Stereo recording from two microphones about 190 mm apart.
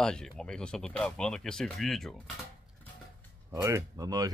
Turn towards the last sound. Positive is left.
turn(degrees=-20)  # may be behind; listen again after turning